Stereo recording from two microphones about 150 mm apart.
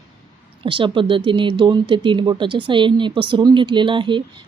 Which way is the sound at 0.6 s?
35° right (ahead or behind).